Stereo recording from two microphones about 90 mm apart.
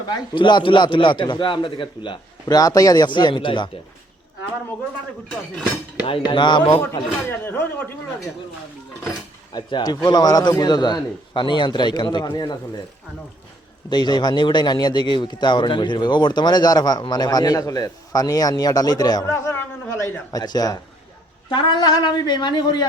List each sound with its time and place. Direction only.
0.1 s a man's voice: 60° left (ahead or behind)
2.6 s a man's voice: 40° left (ahead or behind); by 3.7 s 65° left (ahead or behind)
6.2 s a man's voice: 55° left (ahead or behind)
7.3 s speech: 25° left (ahead or behind)
9.5 s a man's voice: 55° left (ahead or behind)
13.9 s a man's voice: 55° left (ahead or behind)
19.2 s speech: 30° left (ahead or behind)
20.3 s a man's voice: 50° left (ahead or behind)